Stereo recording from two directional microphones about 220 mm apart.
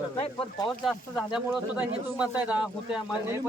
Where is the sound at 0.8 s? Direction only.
Centre (ahead or behind).